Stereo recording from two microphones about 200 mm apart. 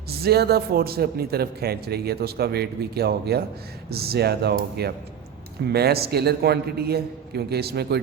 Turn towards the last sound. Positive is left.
turn(degrees=-55)  # may be behind; listen again after turning